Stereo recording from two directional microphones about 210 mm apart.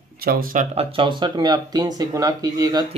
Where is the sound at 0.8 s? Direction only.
25° right (ahead or behind).